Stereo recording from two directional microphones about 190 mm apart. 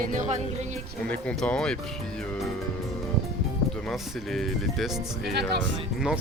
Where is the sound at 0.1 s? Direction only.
40° right (ahead or behind).